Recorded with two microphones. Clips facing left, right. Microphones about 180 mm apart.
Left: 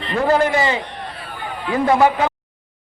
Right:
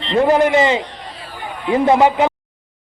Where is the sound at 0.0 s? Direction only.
20° right (ahead or behind).